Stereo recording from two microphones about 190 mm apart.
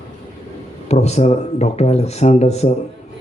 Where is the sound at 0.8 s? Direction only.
35° left (ahead or behind).